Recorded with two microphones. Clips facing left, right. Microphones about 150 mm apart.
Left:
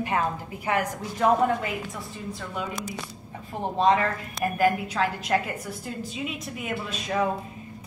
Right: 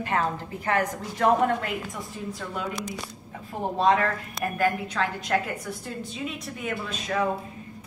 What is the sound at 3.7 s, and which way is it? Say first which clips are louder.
A woman's voice: left 1 dB; centre (ahead or behind).